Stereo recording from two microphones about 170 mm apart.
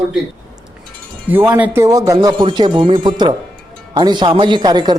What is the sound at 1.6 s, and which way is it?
Speech, 10° right (ahead or behind).